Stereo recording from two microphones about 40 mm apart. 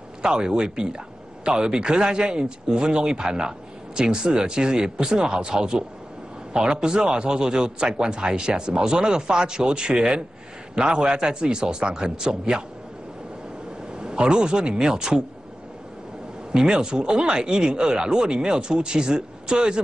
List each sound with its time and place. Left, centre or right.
0.2 s speech: right
13.9 s speech: right
16.5 s speech: right